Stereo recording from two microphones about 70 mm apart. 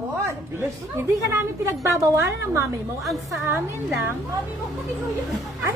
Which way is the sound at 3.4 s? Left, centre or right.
Right.